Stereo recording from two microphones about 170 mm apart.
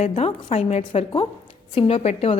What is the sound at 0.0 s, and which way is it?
A woman's voice, 35° left (ahead or behind).